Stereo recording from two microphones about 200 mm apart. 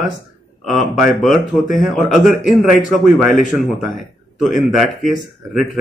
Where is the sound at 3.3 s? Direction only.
40° left (ahead or behind).